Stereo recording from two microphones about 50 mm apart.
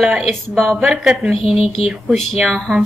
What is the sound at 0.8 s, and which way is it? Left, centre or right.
Speech, centre.